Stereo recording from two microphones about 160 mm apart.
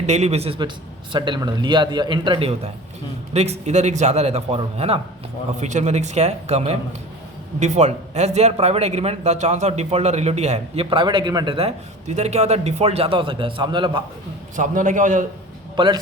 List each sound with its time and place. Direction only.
0.0 s a man's voice: 45° right (ahead or behind)
10.8 s a man's voice: 30° right (ahead or behind)
14.5 s speech: 55° right (ahead or behind)
15.7 s a man's voice: 25° right (ahead or behind)